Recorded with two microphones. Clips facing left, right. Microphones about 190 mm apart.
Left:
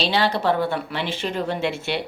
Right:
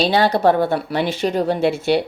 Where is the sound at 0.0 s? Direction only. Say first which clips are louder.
Right 6 dB; 45° right (ahead or behind).